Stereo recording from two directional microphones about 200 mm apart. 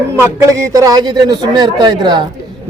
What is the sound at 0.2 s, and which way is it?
A man's voice, 15° right (ahead or behind).